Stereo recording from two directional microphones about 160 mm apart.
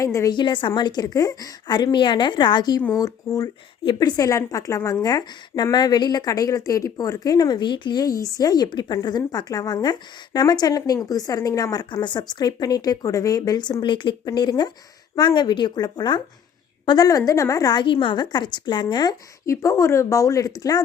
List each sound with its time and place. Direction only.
0.0 s speech: 20° left (ahead or behind)